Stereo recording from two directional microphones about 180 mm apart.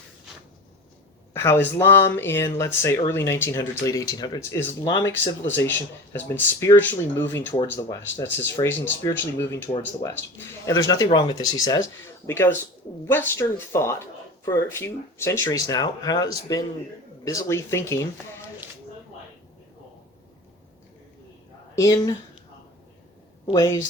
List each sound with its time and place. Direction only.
1.3 s speech: 15° left (ahead or behind)
21.8 s speech: 20° left (ahead or behind)
23.5 s speech: 20° left (ahead or behind)